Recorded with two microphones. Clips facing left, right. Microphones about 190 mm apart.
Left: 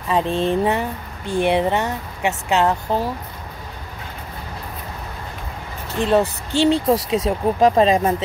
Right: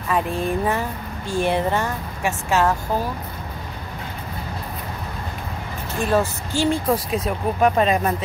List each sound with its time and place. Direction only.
0.1 s speech: 25° left (ahead or behind)
5.9 s speech: 20° left (ahead or behind)
6.5 s speech: 70° left (ahead or behind)
7.2 s speech: 30° left (ahead or behind)